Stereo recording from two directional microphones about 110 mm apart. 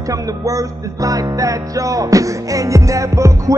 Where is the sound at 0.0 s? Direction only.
30° right (ahead or behind).